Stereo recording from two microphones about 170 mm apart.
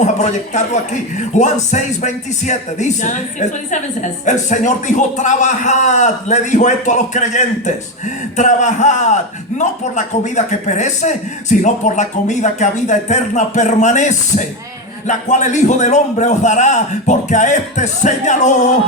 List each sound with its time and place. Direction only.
0.0 s speech: 45° left (ahead or behind)